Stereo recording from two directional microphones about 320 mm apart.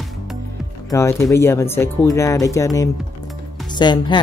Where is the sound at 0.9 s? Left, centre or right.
Centre.